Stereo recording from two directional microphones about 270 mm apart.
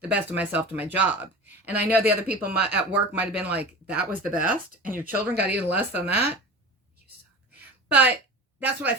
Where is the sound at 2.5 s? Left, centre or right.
Right.